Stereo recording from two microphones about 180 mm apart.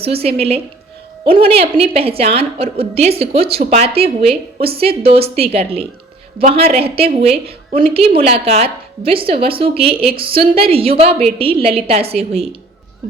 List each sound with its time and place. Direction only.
0.0 s a woman's voice: 30° right (ahead or behind)